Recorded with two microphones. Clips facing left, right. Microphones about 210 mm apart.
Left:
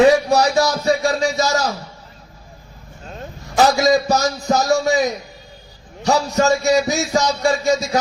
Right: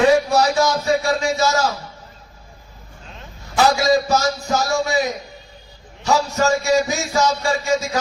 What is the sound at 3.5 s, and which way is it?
Speech, 35° left (ahead or behind).